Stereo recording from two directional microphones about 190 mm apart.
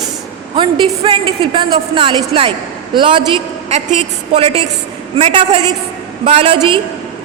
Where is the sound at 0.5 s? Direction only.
25° right (ahead or behind).